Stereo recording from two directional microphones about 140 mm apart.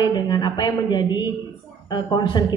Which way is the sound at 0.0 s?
30° left (ahead or behind).